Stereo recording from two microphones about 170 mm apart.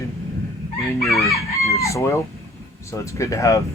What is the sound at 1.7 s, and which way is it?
Speech, 15° left (ahead or behind).